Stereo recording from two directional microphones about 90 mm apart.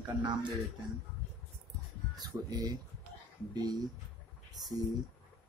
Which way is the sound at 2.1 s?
45° right (ahead or behind).